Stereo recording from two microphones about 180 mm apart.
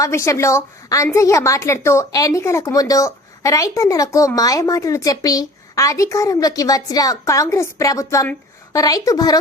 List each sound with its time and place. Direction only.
0.0 s a woman's voice: 15° left (ahead or behind)